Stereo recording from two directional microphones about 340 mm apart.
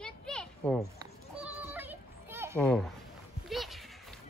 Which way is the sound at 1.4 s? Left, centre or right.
Centre.